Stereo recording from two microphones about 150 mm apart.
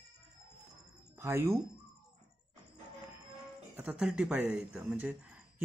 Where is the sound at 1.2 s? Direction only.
15° right (ahead or behind).